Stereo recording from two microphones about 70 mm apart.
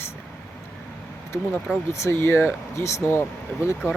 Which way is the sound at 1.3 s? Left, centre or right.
Left.